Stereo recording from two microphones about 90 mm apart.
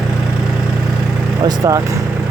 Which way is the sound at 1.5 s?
40° right (ahead or behind).